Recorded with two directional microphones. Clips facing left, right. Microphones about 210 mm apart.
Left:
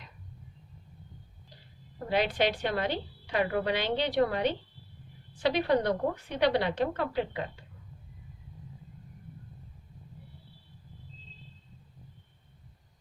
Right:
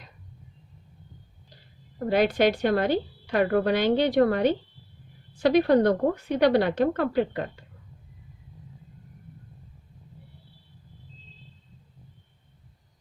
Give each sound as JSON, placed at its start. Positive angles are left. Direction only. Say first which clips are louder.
{"t": 2.0, "sound": "a woman's voice", "louder": "right 6 dB", "side_deg": -45}